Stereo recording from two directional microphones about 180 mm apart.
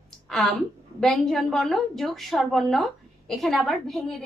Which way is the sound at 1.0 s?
Centre (ahead or behind).